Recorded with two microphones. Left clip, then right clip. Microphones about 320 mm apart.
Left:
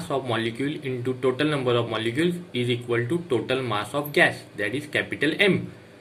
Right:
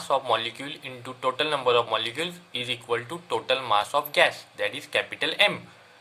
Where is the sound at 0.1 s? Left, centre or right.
Centre.